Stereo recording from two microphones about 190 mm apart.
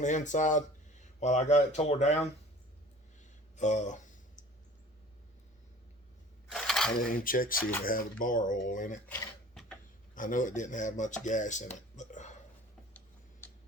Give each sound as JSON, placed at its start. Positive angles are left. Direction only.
{"t": 0.0, "sound": "speech", "side_deg": 40}
{"t": 3.5, "sound": "a sound", "side_deg": 40}
{"t": 6.5, "sound": "a sound", "side_deg": 0}
{"t": 7.0, "sound": "speech", "side_deg": 45}
{"t": 9.0, "sound": "dishes", "side_deg": 5}
{"t": 10.2, "sound": "speech", "side_deg": 45}
{"t": 11.9, "sound": "whispering", "side_deg": 40}
{"t": 13.4, "sound": "tick-tock", "side_deg": 10}